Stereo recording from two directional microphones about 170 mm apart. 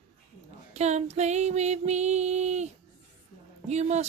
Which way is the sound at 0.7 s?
40° right (ahead or behind).